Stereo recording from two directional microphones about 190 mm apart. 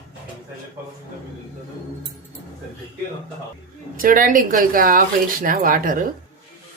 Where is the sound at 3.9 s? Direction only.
45° right (ahead or behind).